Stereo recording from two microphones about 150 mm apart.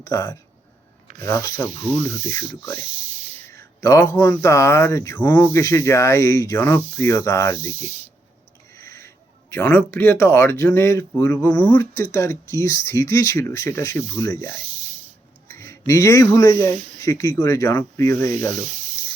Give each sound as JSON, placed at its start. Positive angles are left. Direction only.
{"t": 0.0, "sound": "speech", "side_deg": 20}
{"t": 7.7, "sound": "speech", "side_deg": -45}
{"t": 8.7, "sound": "speech", "side_deg": 20}
{"t": 15.4, "sound": "a sound", "side_deg": 20}
{"t": 15.9, "sound": "speech", "side_deg": 20}